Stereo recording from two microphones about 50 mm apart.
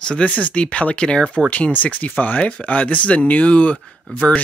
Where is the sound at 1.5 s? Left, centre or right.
Left.